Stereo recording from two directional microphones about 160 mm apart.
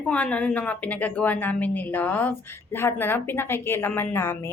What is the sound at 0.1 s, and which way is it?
A woman's voice, 10° left (ahead or behind).